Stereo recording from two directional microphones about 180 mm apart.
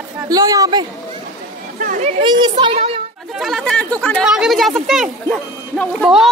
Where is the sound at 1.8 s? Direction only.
45° right (ahead or behind).